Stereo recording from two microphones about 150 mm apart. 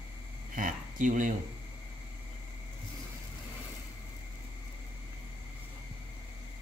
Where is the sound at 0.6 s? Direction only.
65° right (ahead or behind).